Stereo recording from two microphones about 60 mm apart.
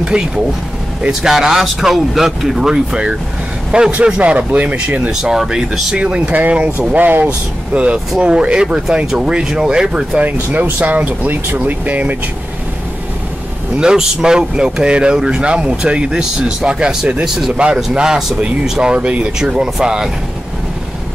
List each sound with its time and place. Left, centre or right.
0.0 s vehicle: centre
1.0 s speech: centre
5.2 s speech: centre; by 7.2 s right
7.2 s speech: centre
10.2 s speech: right
13.7 s speech: centre
17.5 s speech: centre